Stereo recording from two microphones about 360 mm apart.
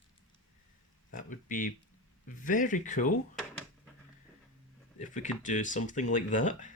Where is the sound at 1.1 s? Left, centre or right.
Left.